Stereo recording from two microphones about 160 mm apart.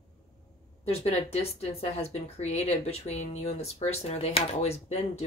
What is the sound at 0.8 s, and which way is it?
Speech, 40° left (ahead or behind).